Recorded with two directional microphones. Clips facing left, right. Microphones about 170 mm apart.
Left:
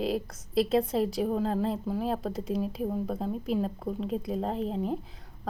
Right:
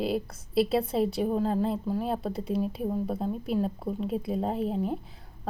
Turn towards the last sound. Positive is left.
turn(degrees=0)  # may be behind; listen again after turning